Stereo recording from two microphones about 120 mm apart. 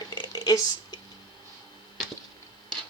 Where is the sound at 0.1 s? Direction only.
35° left (ahead or behind).